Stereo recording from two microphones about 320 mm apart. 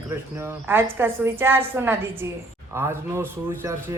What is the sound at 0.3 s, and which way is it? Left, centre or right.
A woman's voice, centre.